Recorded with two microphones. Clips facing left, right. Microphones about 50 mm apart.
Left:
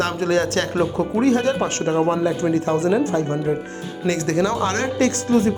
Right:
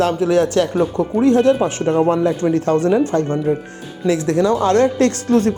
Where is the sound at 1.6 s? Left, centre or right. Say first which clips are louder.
Right 4 dB; centre.